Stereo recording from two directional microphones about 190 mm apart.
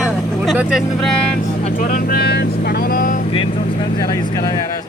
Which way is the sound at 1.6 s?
45° left (ahead or behind).